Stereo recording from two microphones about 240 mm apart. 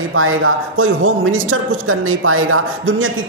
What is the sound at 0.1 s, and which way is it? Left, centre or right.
Speech, right.